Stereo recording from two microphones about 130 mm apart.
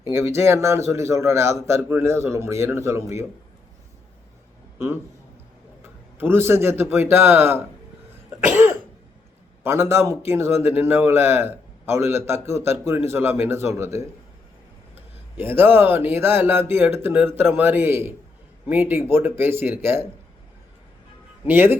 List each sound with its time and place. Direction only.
0.1 s a man's voice: 20° right (ahead or behind)
4.8 s a man's voice: 20° right (ahead or behind)
21.4 s speech: 15° right (ahead or behind)